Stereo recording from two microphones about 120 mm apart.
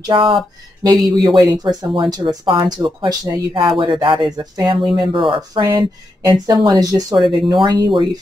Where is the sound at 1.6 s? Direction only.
45° right (ahead or behind).